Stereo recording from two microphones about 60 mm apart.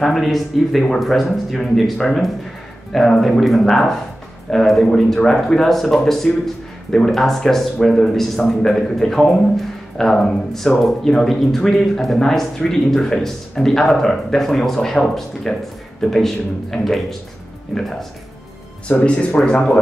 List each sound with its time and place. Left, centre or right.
0.0 s speech: centre
18.9 s speech: centre